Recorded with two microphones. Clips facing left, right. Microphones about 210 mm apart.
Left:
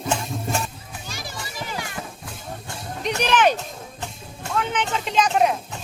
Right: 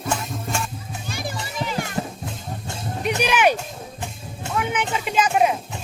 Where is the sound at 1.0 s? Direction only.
55° right (ahead or behind).